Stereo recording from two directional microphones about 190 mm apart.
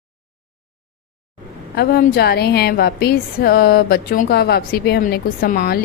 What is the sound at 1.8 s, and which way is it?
A woman's voice, 55° left (ahead or behind).